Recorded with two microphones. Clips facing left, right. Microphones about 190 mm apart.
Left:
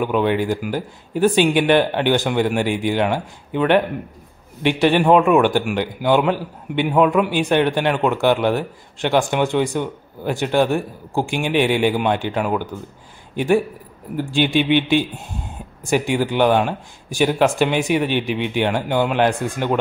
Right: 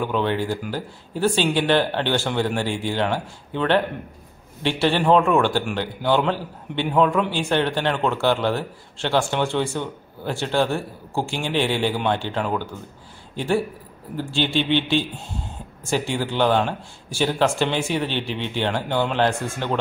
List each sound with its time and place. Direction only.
0.0 s a man's voice: 15° left (ahead or behind)